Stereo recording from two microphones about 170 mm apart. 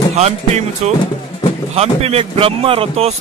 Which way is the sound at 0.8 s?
40° right (ahead or behind).